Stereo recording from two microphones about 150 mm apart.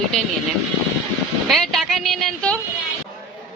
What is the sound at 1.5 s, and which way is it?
Speech, centre (ahead or behind).